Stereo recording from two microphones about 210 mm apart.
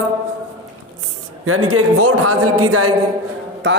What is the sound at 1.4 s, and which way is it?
A man's voice, 90° right.